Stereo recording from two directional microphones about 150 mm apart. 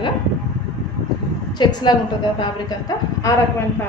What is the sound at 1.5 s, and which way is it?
A woman's voice, 30° left (ahead or behind).